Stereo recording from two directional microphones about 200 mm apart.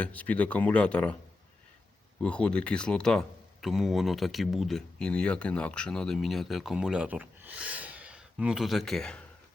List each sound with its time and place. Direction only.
0.0 s speech: 5° left (ahead or behind)
2.2 s speech: 5° left (ahead or behind)